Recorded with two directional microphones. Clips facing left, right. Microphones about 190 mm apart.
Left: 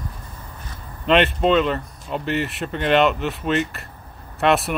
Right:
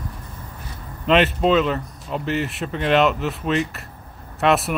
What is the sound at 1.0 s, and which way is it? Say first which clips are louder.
Speech: even; centre (ahead or behind).